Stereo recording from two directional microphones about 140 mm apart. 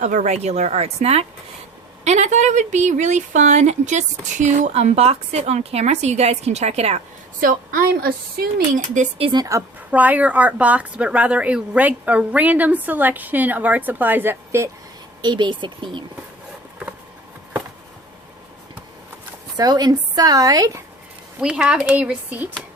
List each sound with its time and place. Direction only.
0.0 s speech: 60° right (ahead or behind)
7.4 s speech: 85° right
9.1 s speech: 40° right (ahead or behind)
9.4 s a woman's voice: 20° right (ahead or behind)
9.9 s speech: 10° right (ahead or behind)
15.2 s speech: 30° right (ahead or behind)
19.5 s a woman's voice: 30° right (ahead or behind)
21.4 s speech: 5° right (ahead or behind)